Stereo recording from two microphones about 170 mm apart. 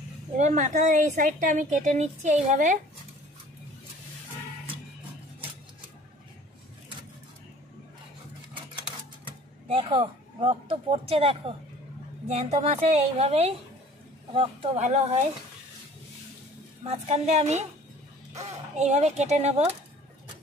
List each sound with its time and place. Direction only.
0.4 s a woman's voice: 45° right (ahead or behind)
9.2 s speech: 30° right (ahead or behind)
16.8 s speech: 40° right (ahead or behind)